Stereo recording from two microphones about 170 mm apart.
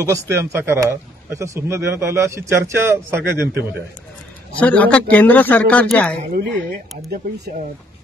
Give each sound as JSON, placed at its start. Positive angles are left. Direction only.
{"t": 0.0, "sound": "a man's voice", "side_deg": -15}
{"t": 4.6, "sound": "a man's voice", "side_deg": 10}